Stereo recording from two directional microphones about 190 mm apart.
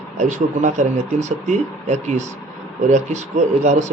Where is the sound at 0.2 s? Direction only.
40° right (ahead or behind).